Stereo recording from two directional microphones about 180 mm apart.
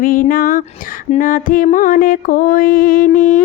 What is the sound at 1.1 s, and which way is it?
Mantra, 50° left (ahead or behind).